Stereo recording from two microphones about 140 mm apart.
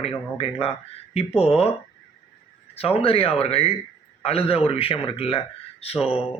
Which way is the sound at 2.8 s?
45° left (ahead or behind).